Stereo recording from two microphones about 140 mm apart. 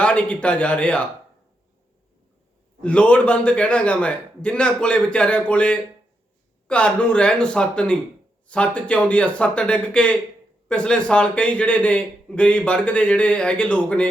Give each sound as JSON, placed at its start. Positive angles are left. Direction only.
{"t": 0.0, "sound": "a man's voice", "side_deg": 10}
{"t": 2.8, "sound": "a man's voice", "side_deg": 10}